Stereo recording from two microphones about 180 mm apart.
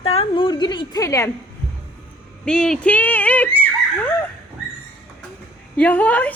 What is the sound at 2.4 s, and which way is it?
Speech, 5° left (ahead or behind).